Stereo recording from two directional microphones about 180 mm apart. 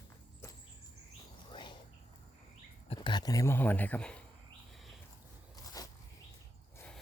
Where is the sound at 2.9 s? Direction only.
25° left (ahead or behind); by 4.2 s 5° left (ahead or behind).